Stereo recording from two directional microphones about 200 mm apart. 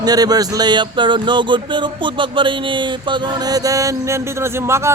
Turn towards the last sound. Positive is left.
turn(degrees=-15)  # may be behind; listen again after turning